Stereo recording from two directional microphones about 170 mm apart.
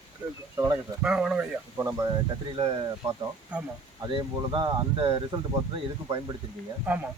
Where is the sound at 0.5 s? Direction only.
20° right (ahead or behind).